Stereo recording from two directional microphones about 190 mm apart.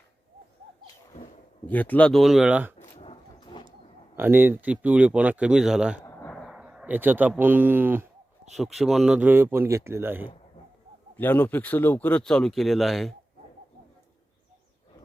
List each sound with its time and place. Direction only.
1.6 s speech: 10° left (ahead or behind); by 2.7 s 5° right (ahead or behind)
3.0 s a sound: 30° left (ahead or behind)
4.1 s speech: 10° right (ahead or behind)
6.1 s a sound: 10° left (ahead or behind); by 8.0 s 10° right (ahead or behind)
8.5 s speech: centre (ahead or behind)
11.2 s speech: 10° left (ahead or behind)